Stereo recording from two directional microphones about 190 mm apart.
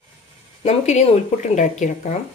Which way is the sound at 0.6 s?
35° left (ahead or behind).